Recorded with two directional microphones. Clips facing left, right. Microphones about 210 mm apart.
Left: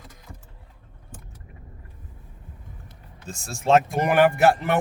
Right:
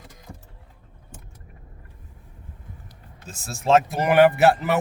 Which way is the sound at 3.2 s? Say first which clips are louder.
Even; centre (ahead or behind).